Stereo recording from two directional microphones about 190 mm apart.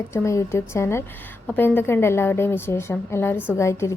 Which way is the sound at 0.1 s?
15° left (ahead or behind).